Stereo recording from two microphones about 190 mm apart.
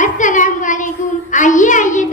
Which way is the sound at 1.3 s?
40° left (ahead or behind).